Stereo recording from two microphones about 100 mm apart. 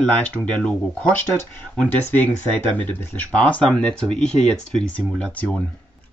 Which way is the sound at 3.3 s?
10° left (ahead or behind).